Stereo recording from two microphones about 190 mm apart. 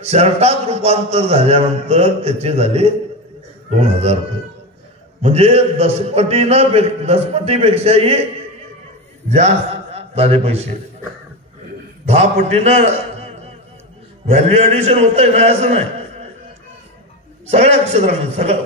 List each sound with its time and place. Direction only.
0.0 s a man's voice: 35° right (ahead or behind)
5.2 s a man's voice: 30° right (ahead or behind)
9.9 s a man's voice: 35° right (ahead or behind)
12.1 s a man's voice: 35° right (ahead or behind)
17.5 s a man's voice: 35° right (ahead or behind)